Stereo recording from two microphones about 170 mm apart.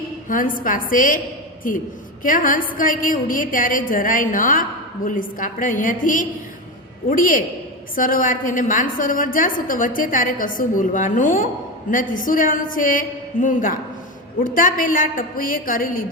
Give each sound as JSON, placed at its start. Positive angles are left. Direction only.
{"t": 0.3, "sound": "a woman's voice", "side_deg": 55}
{"t": 2.2, "sound": "a woman's voice", "side_deg": 55}